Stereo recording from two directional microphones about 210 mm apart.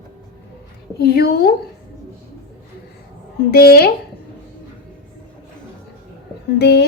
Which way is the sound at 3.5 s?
45° left (ahead or behind).